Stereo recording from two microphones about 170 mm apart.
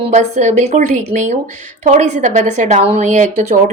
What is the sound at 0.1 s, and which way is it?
Speech, 45° right (ahead or behind).